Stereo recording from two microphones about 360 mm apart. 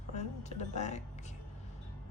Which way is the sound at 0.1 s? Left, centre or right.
Centre.